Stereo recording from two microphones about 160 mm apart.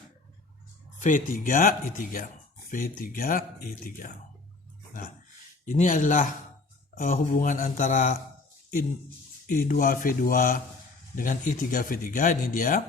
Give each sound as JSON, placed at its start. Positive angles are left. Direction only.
{"t": 0.9, "sound": "speech", "side_deg": 50}
{"t": 5.6, "sound": "speech", "side_deg": 55}
{"t": 9.5, "sound": "speech", "side_deg": 55}